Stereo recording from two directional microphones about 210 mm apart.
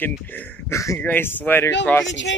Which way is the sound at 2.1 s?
60° left (ahead or behind).